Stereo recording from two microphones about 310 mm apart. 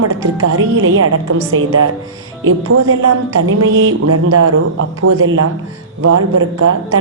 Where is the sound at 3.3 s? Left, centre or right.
Right.